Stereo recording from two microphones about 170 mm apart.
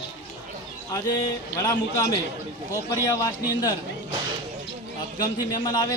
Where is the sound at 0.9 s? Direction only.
20° left (ahead or behind).